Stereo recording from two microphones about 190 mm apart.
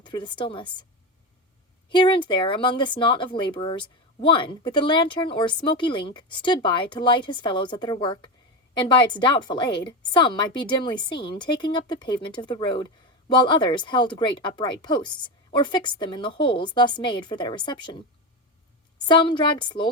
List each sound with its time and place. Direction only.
0.0 s a woman's voice: 25° left (ahead or behind)
1.9 s a woman's voice: 25° left (ahead or behind)
18.9 s a woman's voice: 25° left (ahead or behind)